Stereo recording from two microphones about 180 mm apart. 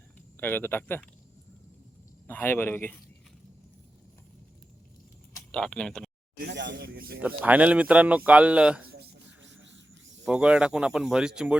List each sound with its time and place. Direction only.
0.3 s speech: 10° left (ahead or behind)
2.2 s speech: 10° left (ahead or behind)
5.5 s speech: 5° left (ahead or behind)
6.3 s speech: 65° right (ahead or behind)
7.2 s speech: 10° right (ahead or behind)
9.0 s a sound: 90° right
10.2 s speech: 5° right (ahead or behind)